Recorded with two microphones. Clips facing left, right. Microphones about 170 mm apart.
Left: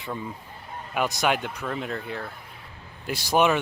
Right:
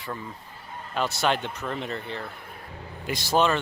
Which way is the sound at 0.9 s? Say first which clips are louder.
Left 1 dB; 15° left (ahead or behind).